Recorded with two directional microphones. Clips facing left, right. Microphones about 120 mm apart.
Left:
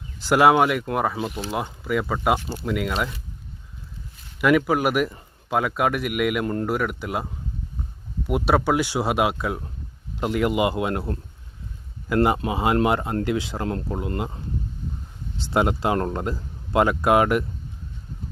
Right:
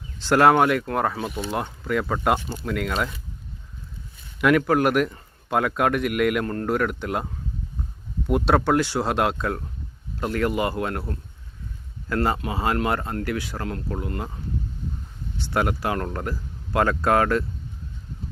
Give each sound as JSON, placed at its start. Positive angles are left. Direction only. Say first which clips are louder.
{"t": 0.2, "sound": "speech", "louder": "even", "side_deg": 10}
{"t": 4.4, "sound": "speech", "louder": "even", "side_deg": 5}
{"t": 6.4, "sound": "speech", "louder": "even", "side_deg": 15}
{"t": 8.3, "sound": "speech", "louder": "right 1 dB", "side_deg": 5}
{"t": 15.4, "sound": "speech", "louder": "left 3 dB", "side_deg": 25}